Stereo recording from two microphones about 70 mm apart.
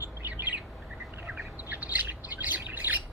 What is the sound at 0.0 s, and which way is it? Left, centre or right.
Bird, right.